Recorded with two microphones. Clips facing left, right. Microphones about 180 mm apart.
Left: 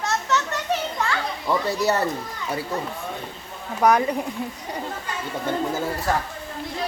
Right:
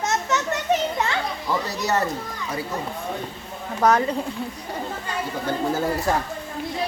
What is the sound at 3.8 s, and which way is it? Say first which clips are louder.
Speech: left 1 dB; 10° left (ahead or behind).